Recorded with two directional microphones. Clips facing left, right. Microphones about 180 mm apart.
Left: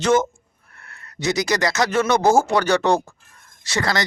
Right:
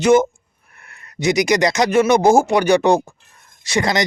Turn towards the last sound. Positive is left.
turn(degrees=-15)  # may be behind; listen again after turning